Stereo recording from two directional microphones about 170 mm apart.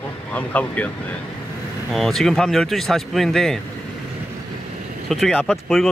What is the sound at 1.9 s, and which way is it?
Speech, centre (ahead or behind).